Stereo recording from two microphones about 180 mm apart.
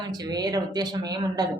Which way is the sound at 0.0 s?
25° right (ahead or behind).